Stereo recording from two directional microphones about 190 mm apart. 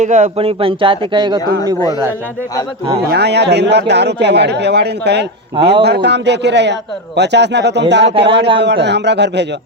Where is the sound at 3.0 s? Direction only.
60° right (ahead or behind).